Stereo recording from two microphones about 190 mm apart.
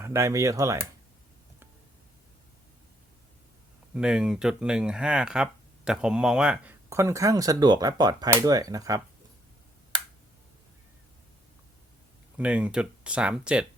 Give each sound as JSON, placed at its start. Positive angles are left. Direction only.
{"t": 0.0, "sound": "speech", "side_deg": -15}
{"t": 3.9, "sound": "speech", "side_deg": -5}
{"t": 12.4, "sound": "speech", "side_deg": -5}